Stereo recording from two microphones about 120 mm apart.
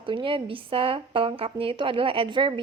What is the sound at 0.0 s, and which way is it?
A woman's voice, 45° right (ahead or behind).